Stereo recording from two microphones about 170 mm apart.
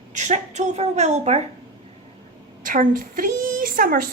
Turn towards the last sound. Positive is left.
turn(degrees=-60)  # may be behind; listen again after turning